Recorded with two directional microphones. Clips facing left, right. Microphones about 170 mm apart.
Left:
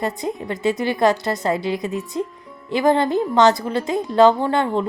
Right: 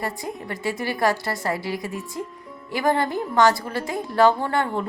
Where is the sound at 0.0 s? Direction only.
20° left (ahead or behind).